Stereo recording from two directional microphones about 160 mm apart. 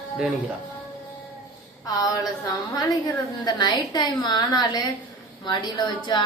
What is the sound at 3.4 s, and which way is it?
A woman's voice, 25° left (ahead or behind).